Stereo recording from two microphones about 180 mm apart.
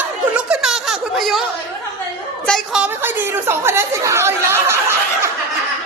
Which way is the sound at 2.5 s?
5° right (ahead or behind).